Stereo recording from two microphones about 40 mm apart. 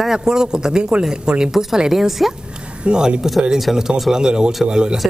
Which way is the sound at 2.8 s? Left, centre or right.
Right.